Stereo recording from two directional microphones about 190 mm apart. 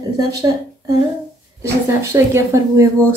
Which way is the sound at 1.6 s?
15° right (ahead or behind).